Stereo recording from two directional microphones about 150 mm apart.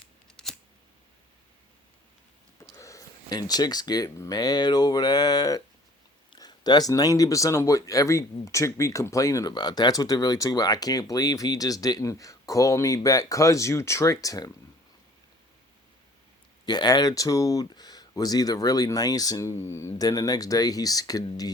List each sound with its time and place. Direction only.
0.4 s camera: 5° left (ahead or behind)
2.7 s speech: 20° left (ahead or behind)
16.6 s speech: 30° left (ahead or behind)